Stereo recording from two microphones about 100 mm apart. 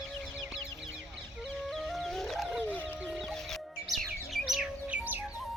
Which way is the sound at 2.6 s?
15° left (ahead or behind).